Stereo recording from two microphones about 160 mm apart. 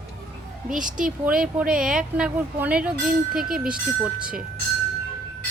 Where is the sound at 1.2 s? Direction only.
5° right (ahead or behind).